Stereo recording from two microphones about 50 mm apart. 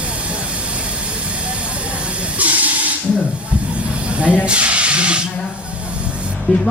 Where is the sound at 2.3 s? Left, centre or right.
Right.